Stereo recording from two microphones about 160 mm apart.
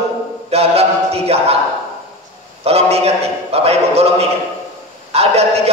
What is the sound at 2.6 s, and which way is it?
Speech, 40° right (ahead or behind).